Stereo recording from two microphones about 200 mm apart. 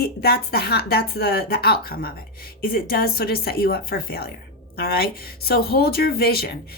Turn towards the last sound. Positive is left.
turn(degrees=50)  # may be behind; listen again after turning